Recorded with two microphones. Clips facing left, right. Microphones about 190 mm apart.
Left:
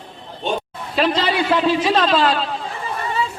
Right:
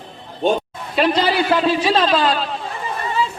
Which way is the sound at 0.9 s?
Centre (ahead or behind).